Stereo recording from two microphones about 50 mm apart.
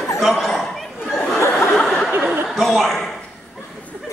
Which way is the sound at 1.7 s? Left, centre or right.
Centre.